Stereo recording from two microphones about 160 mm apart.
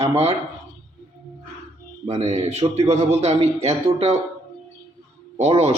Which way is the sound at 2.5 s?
40° right (ahead or behind).